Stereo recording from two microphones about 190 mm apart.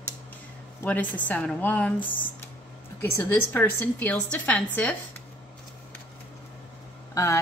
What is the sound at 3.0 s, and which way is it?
A woman's voice, 10° left (ahead or behind).